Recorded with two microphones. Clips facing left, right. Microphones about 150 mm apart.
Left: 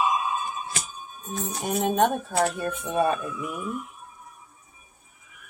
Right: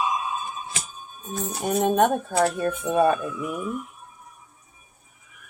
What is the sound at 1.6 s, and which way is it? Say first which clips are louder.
Speech: right 3 dB; 50° right (ahead or behind).